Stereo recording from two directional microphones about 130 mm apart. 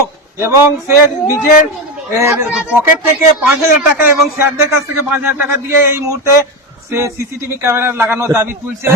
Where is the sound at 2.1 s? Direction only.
20° right (ahead or behind).